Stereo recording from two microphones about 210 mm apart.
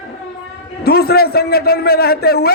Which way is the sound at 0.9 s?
50° left (ahead or behind).